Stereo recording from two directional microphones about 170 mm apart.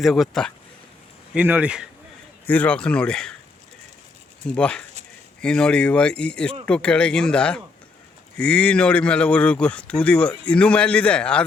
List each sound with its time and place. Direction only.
0.0 s speech: centre (ahead or behind)
1.3 s speech: 10° right (ahead or behind)
2.5 s speech: 10° left (ahead or behind)
4.4 s a man's voice: 5° left (ahead or behind)